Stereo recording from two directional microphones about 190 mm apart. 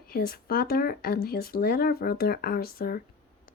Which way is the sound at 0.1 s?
50° left (ahead or behind).